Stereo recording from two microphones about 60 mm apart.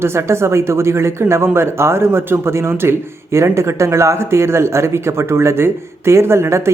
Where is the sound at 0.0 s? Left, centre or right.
Right.